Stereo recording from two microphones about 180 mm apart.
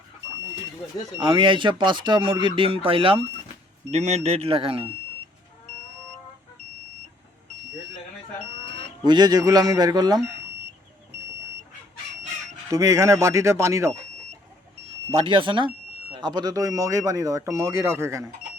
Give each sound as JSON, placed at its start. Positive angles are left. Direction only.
{"t": 1.2, "sound": "speech", "side_deg": -25}
{"t": 9.0, "sound": "speech", "side_deg": -20}
{"t": 12.7, "sound": "speech", "side_deg": -15}
{"t": 15.1, "sound": "speech", "side_deg": -30}